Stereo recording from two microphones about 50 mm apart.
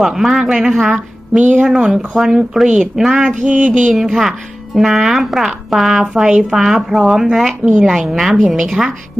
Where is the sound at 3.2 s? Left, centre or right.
Right.